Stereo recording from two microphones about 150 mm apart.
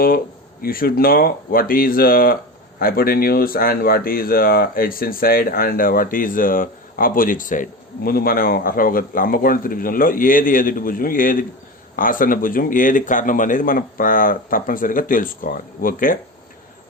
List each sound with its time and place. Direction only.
0.6 s speech: 75° left (ahead or behind)